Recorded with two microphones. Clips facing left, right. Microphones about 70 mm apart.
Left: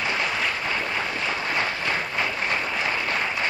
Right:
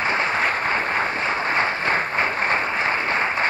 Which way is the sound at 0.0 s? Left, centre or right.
Right.